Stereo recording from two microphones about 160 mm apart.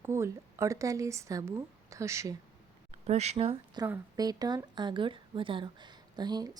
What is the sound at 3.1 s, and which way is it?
Speech, 45° right (ahead or behind).